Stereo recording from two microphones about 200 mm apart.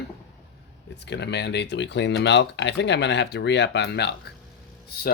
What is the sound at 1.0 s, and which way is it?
Speech, 60° left (ahead or behind).